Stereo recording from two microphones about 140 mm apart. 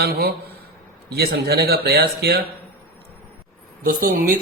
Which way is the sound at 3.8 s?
90° right.